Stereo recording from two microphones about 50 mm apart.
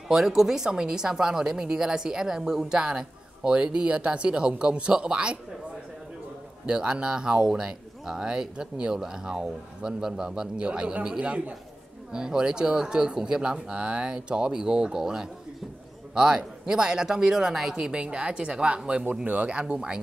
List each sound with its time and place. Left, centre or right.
0.1 s speech: centre
6.6 s speech: centre
12.1 s speech: centre
19.2 s speech: right
19.6 s speech: centre